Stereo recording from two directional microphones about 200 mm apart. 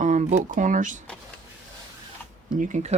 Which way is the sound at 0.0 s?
35° right (ahead or behind).